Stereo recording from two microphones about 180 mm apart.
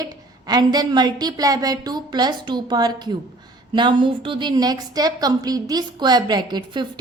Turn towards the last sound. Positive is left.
turn(degrees=-25)  # may be behind; listen again after turning